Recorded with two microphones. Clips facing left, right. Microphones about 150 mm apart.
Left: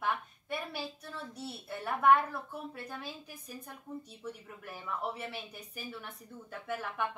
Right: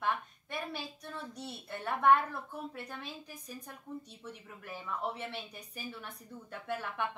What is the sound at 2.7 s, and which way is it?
A woman's voice, 5° left (ahead or behind).